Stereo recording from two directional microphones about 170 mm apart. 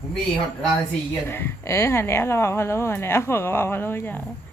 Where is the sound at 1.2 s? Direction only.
15° left (ahead or behind).